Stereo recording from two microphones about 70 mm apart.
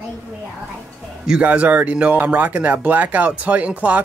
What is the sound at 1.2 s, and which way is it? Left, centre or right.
Speech, centre.